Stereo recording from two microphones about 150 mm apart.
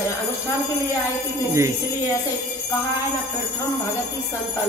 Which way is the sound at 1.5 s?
20° right (ahead or behind).